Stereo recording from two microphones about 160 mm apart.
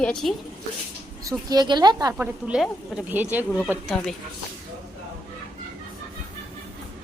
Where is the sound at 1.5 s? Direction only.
25° right (ahead or behind).